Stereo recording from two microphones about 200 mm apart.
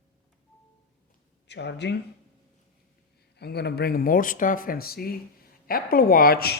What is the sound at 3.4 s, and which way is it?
A man's voice, 55° left (ahead or behind).